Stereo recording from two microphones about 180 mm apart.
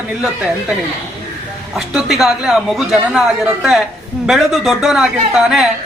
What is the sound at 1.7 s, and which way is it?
A woman's voice, 5° right (ahead or behind).